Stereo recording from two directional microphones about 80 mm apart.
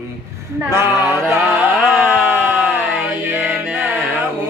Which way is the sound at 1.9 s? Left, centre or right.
Centre.